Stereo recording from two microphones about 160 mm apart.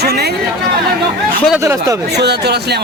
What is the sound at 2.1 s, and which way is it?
Speech, 90° right.